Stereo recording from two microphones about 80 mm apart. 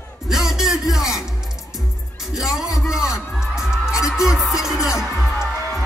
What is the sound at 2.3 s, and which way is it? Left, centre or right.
Music, centre.